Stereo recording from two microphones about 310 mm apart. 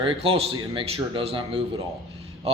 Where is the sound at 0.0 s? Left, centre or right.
Centre.